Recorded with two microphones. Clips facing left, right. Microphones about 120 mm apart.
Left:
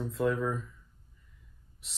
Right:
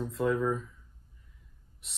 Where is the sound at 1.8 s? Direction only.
Centre (ahead or behind).